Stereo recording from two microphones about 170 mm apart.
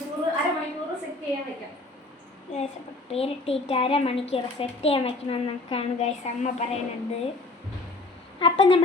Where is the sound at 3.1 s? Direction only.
35° left (ahead or behind).